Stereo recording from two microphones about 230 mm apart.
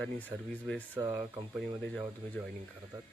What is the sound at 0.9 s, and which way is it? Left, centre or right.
Speech, centre.